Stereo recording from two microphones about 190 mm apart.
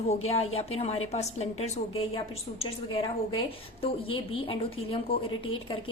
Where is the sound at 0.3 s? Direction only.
30° left (ahead or behind).